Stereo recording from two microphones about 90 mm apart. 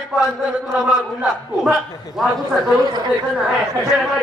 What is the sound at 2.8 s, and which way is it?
Speech, 50° right (ahead or behind).